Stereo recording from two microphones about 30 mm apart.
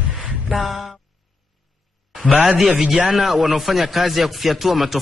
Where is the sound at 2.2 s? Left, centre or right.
Right.